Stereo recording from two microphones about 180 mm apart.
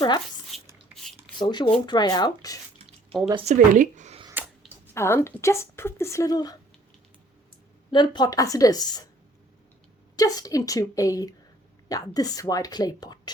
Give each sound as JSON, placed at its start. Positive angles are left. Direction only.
{"t": 0.5, "sound": "a sound", "side_deg": 0}
{"t": 1.4, "sound": "a woman's voice", "side_deg": 25}
{"t": 2.8, "sound": "drip", "side_deg": 0}
{"t": 3.4, "sound": "speech", "side_deg": -40}
{"t": 4.6, "sound": "a sound", "side_deg": 0}
{"t": 4.9, "sound": "a woman's voice", "side_deg": 15}
{"t": 7.9, "sound": "a woman's voice", "side_deg": 25}
{"t": 10.2, "sound": "a woman's voice", "side_deg": 20}